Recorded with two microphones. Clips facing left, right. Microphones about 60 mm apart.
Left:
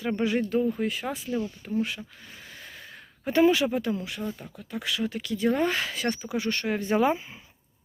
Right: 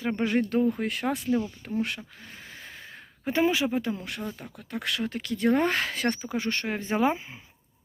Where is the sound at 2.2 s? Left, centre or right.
Right.